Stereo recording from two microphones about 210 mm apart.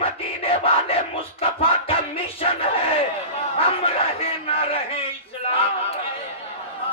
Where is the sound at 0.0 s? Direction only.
25° left (ahead or behind).